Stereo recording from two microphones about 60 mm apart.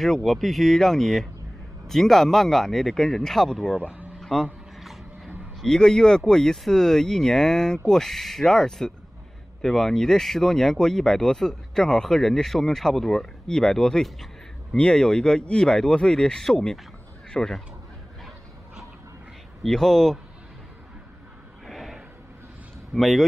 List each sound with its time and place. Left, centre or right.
0.0 s speech: centre
3.8 s speech: right
4.2 s a sound: centre
5.6 s speech: centre
14.8 s speech: centre
19.6 s speech: centre
21.6 s a sound: centre
22.9 s speech: centre